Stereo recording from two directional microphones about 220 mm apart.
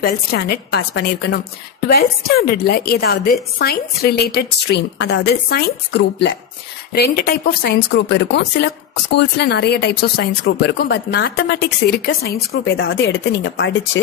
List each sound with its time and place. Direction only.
0.0 s speech: 45° left (ahead or behind)